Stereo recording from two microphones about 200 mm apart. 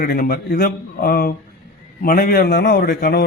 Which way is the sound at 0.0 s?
50° left (ahead or behind).